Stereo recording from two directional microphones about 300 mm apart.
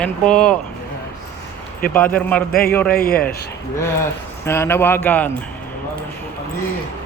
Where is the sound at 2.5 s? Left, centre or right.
Left.